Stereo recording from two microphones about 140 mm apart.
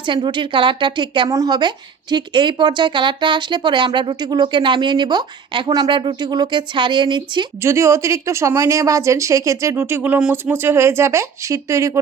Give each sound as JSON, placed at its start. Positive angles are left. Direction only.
{"t": 0.1, "sound": "a woman's voice", "side_deg": -35}
{"t": 7.6, "sound": "speech", "side_deg": -20}